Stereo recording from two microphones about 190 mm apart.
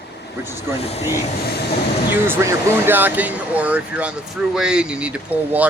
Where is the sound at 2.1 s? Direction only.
10° right (ahead or behind).